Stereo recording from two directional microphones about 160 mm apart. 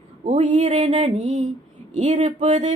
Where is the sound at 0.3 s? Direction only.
45° right (ahead or behind).